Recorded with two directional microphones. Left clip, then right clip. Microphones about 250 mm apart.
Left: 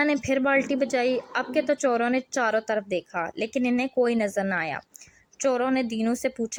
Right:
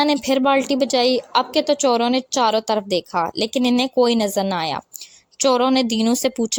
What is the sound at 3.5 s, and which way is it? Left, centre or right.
A woman's voice, right.